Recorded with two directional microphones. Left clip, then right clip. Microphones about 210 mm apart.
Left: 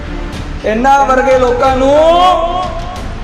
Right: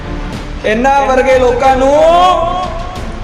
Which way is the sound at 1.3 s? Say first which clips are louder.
Right 1 dB; 5° right (ahead or behind).